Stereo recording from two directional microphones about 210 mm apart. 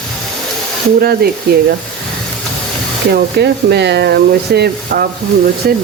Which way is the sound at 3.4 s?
50° right (ahead or behind).